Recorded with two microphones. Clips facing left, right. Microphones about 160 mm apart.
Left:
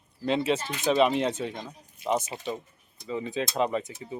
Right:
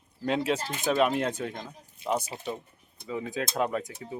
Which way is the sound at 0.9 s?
5° right (ahead or behind).